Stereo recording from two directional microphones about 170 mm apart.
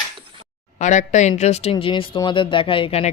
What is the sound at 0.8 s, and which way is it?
Speech, 45° left (ahead or behind).